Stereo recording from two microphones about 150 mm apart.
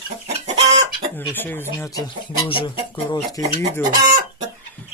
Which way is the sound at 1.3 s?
15° left (ahead or behind).